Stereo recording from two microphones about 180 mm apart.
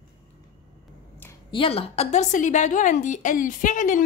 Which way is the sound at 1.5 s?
30° left (ahead or behind).